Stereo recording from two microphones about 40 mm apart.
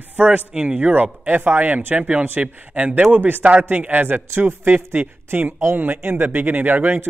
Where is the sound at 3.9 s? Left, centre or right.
Right.